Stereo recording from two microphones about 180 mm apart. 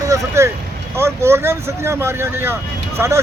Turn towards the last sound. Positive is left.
turn(degrees=-15)  # may be behind; listen again after turning